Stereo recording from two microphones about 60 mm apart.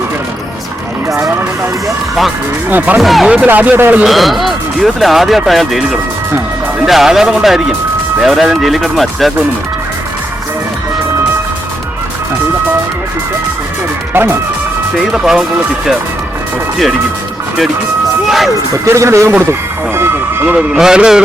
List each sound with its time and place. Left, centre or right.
2.6 s speech: right
3.0 s speech: centre
3.4 s speech: right
4.0 s speech: centre
14.1 s speech: right
14.9 s speech: centre
18.3 s speech: centre
18.9 s speech: right
19.4 s vehicle: right
20.6 s speech: centre